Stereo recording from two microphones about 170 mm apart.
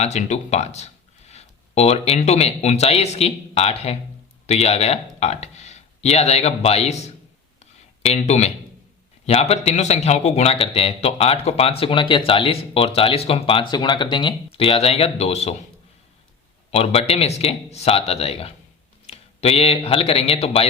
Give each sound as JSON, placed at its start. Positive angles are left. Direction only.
{"t": 0.0, "sound": "speech", "side_deg": 40}
{"t": 8.0, "sound": "a man's voice", "side_deg": 40}
{"t": 16.7, "sound": "a man's voice", "side_deg": 35}